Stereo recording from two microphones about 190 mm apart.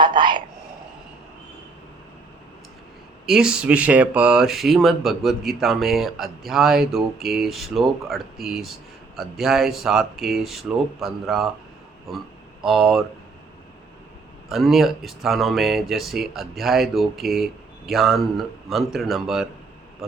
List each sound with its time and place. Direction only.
0.0 s whispering: 25° right (ahead or behind)
3.2 s speech: 5° right (ahead or behind)
12.6 s speech: centre (ahead or behind)
14.5 s speech: centre (ahead or behind)